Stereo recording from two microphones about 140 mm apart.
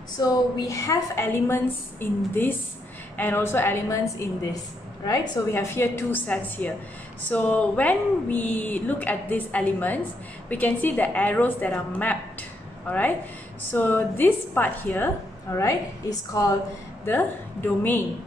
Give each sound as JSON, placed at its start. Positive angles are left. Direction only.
{"t": 0.2, "sound": "a woman's voice", "side_deg": 25}
{"t": 5.5, "sound": "a woman's voice", "side_deg": 20}
{"t": 15.5, "sound": "a woman's voice", "side_deg": 25}
{"t": 17.0, "sound": "speech", "side_deg": 15}